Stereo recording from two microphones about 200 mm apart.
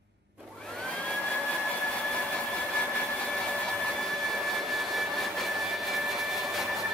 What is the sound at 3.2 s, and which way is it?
Hair dryer, 5° left (ahead or behind).